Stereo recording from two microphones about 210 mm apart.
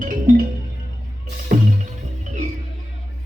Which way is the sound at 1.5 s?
40° right (ahead or behind).